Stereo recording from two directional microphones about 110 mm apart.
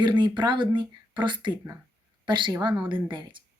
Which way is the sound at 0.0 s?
45° right (ahead or behind).